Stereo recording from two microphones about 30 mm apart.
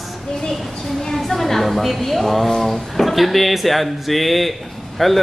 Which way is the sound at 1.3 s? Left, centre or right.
Centre.